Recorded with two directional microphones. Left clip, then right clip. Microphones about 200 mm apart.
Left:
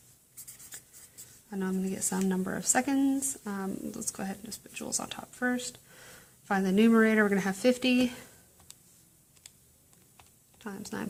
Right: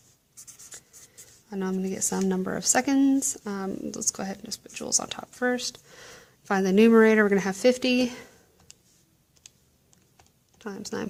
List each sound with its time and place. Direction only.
1.5 s speech: 30° right (ahead or behind)
10.6 s speech: 30° right (ahead or behind)